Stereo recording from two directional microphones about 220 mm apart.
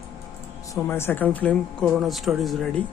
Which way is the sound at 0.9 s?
10° left (ahead or behind).